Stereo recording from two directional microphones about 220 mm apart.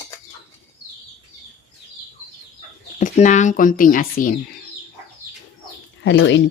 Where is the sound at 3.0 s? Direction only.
35° left (ahead or behind).